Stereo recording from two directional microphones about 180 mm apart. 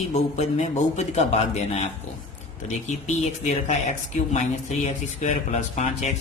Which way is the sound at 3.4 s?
40° left (ahead or behind).